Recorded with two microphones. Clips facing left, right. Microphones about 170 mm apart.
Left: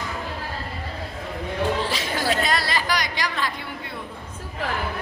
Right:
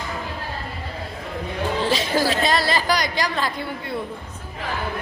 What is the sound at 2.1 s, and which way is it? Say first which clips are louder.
A woman's voice: right 2 dB; 30° right (ahead or behind).